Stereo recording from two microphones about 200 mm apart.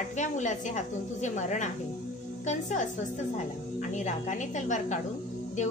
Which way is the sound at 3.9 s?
40° left (ahead or behind).